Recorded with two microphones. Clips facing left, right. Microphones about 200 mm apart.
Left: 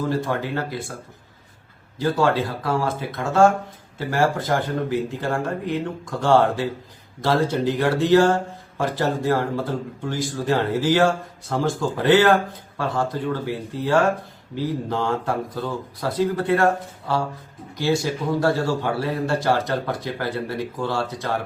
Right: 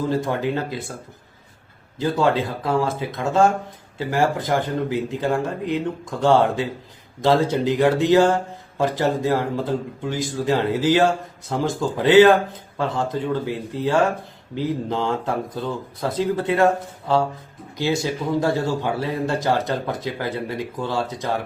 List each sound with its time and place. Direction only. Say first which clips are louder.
0.1 s a man's voice: right 2 dB; 20° right (ahead or behind)
2.0 s a man's voice: even; 20° right (ahead or behind)